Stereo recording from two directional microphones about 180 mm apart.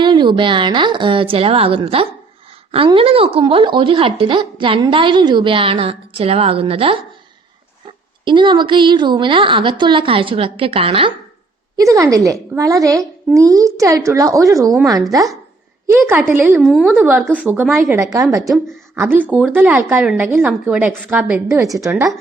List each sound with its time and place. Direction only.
0.0 s a woman's voice: 25° right (ahead or behind)
8.2 s a woman's voice: 25° right (ahead or behind)
11.8 s a woman's voice: 15° right (ahead or behind)
16.6 s a woman's voice: centre (ahead or behind)
17.0 s a woman's voice: 10° right (ahead or behind)
21.4 s a woman's voice: 15° right (ahead or behind)